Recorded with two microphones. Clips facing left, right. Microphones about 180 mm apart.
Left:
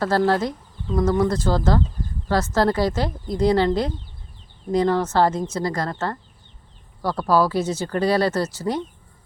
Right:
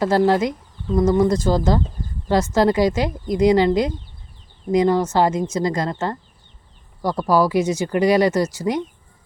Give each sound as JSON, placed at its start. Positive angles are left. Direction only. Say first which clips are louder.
{"t": 0.0, "sound": "speech", "louder": "right 3 dB", "side_deg": -15}